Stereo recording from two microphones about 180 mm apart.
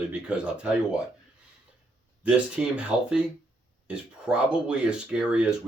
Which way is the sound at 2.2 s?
5° right (ahead or behind).